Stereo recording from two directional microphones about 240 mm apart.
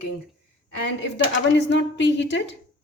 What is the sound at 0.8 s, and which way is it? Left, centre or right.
Speech, left.